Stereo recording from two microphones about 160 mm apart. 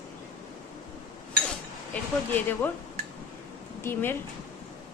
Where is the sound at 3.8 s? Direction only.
15° left (ahead or behind).